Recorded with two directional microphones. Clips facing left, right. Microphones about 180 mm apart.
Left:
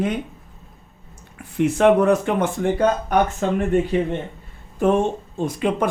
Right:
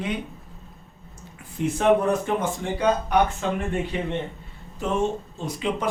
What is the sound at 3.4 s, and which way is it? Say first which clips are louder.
Speech: left 5 dB; 45° left (ahead or behind).